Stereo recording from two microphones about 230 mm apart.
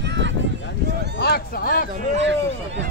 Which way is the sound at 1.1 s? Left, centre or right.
Left.